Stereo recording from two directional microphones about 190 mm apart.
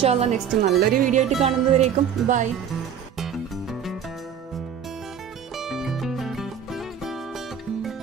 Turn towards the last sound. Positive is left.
turn(degrees=0)  # may be behind; listen again after turning